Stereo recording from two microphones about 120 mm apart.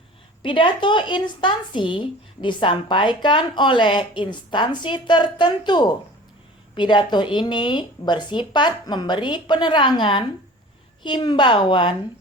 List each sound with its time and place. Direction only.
0.4 s speech: 45° left (ahead or behind)